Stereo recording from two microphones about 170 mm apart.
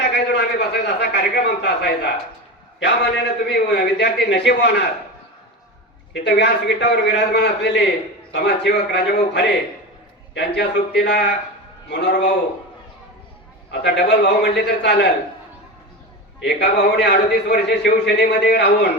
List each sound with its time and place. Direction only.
0.0 s a sound: 75° left (ahead or behind)
2.8 s a man's voice: 80° left
6.2 s a man's voice: 85° left
10.6 s a man's voice: 85° left
13.7 s a man's voice: 90° left
16.4 s a man's voice: 85° left